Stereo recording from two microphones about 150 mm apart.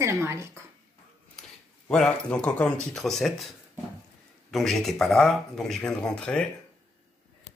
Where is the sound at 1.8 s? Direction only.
5° left (ahead or behind).